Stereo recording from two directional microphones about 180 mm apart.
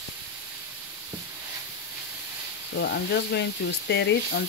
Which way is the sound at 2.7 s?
80° left.